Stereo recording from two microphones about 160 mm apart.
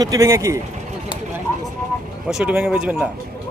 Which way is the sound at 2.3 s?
5° right (ahead or behind).